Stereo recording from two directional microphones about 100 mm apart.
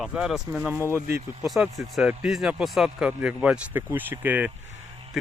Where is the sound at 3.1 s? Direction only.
15° right (ahead or behind).